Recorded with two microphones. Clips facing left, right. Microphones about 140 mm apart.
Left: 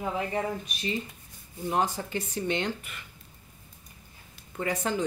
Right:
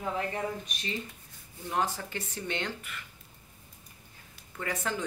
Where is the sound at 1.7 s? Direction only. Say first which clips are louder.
Left 3 dB; 20° left (ahead or behind).